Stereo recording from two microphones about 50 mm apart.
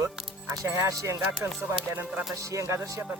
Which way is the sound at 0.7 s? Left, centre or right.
Right.